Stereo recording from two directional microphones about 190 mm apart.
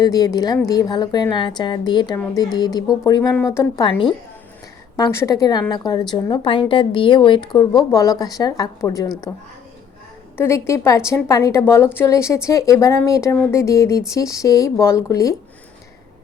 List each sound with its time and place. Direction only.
0.0 s a woman's voice: 20° left (ahead or behind)
4.9 s a woman's voice: 15° left (ahead or behind)